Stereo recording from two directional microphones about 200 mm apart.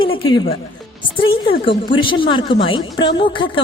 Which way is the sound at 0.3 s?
20° left (ahead or behind).